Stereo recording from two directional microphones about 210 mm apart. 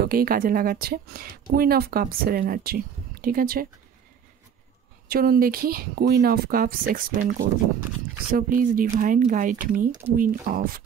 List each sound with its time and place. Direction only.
0.0 s speech: 45° right (ahead or behind)
5.0 s speech: 45° right (ahead or behind)